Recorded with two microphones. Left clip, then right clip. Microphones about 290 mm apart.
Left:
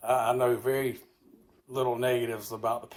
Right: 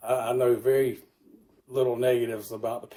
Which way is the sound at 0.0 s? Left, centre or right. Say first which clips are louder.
Even; centre.